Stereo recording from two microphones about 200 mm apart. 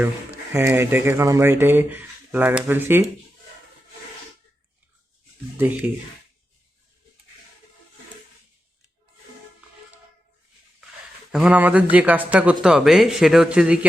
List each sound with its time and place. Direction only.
0.5 s speech: 10° right (ahead or behind)
5.5 s speech: 10° right (ahead or behind)
11.3 s speech: 5° right (ahead or behind)